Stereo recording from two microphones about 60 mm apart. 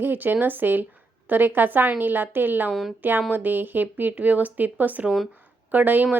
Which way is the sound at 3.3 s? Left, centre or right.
Right.